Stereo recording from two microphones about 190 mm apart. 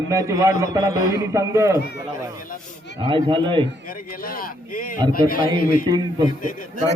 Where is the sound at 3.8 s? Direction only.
50° left (ahead or behind).